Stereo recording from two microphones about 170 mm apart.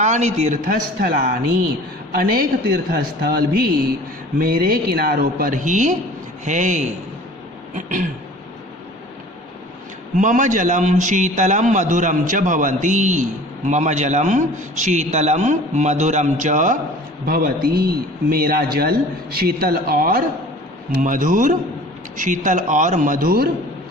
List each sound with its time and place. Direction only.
0.0 s a man's voice: 40° right (ahead or behind)
10.2 s a man's voice: 50° right (ahead or behind)
17.2 s a man's voice: 60° right (ahead or behind)